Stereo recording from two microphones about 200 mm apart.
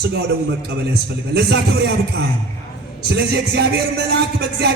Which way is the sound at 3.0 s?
55° right (ahead or behind).